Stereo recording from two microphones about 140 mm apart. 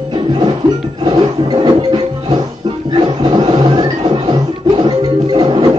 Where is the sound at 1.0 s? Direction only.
35° right (ahead or behind).